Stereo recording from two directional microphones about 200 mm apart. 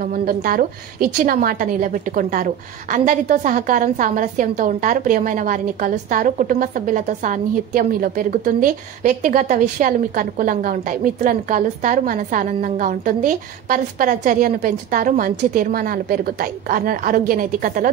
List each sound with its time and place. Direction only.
0.0 s a woman's voice: 45° right (ahead or behind)